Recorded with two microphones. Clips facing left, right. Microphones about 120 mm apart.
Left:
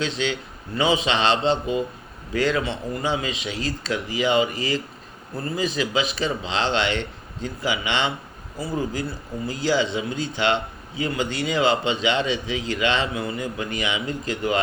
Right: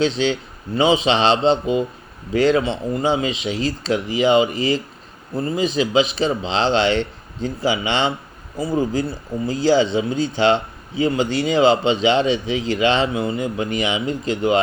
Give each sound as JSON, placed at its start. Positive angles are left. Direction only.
{"t": 0.0, "sound": "speech", "side_deg": -30}